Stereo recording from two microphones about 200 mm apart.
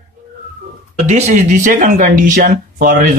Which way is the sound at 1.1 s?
35° right (ahead or behind).